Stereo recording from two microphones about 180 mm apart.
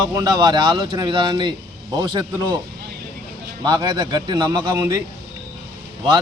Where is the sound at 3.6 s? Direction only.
25° right (ahead or behind).